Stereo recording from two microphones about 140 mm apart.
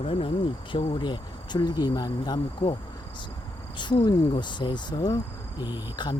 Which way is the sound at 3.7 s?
30° left (ahead or behind).